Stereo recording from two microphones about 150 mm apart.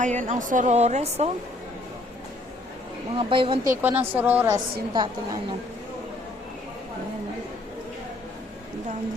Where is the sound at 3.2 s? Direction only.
35° right (ahead or behind).